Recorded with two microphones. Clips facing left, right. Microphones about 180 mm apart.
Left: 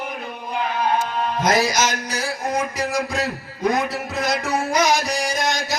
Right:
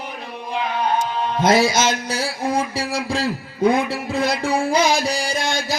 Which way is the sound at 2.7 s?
30° right (ahead or behind).